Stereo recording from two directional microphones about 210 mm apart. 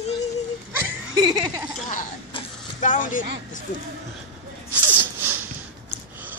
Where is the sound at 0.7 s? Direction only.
15° right (ahead or behind).